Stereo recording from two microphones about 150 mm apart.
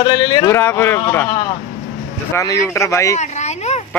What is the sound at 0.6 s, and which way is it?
Speech, 15° left (ahead or behind).